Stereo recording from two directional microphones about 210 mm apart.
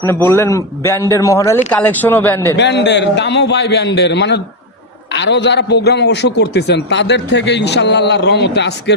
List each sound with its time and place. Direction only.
0.0 s a man's voice: 10° left (ahead or behind)
2.6 s a man's voice: 55° left (ahead or behind)